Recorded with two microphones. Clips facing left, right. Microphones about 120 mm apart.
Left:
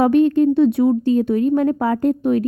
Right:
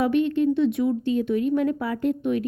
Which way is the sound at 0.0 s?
40° left (ahead or behind).